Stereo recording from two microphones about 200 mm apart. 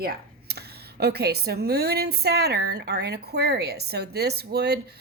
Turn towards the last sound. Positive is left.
turn(degrees=-55)  # may be behind; listen again after turning